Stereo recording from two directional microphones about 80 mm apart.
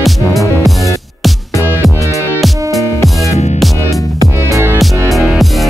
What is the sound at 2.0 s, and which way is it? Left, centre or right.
Music, right.